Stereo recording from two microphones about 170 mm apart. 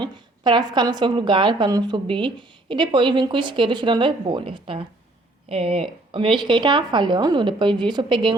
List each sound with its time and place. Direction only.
0.0 s a woman's voice: 25° right (ahead or behind)